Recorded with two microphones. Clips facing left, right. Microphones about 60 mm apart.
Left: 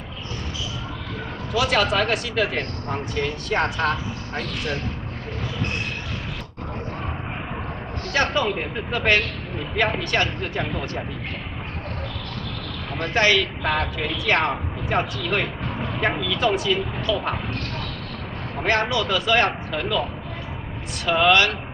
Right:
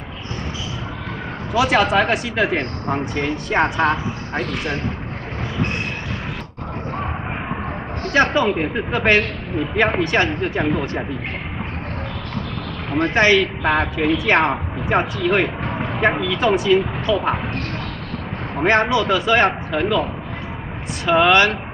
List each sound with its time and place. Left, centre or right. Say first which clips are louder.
1.5 s speech: right 4 dB; centre
8.1 s speech: right 5 dB; right
13.0 s speech: right 4 dB; right
13.4 s a woman's voice: right 5 dB; centre
14.2 s speech: even; right
15.8 s vehicle: right 5 dB; right
16.2 s speech: right 4 dB; right
18.6 s speech: right 5 dB; right
21.0 s speech: right 4 dB; right